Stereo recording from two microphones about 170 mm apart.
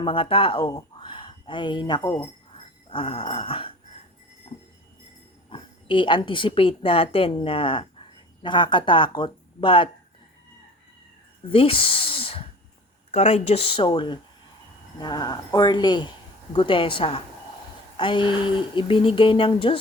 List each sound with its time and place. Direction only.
0.0 s speech: 30° left (ahead or behind)
2.9 s speech: 30° left (ahead or behind)
5.5 s a woman's voice: 30° left (ahead or behind)
11.5 s a sound: 30° left (ahead or behind)
13.1 s speech: 40° left (ahead or behind)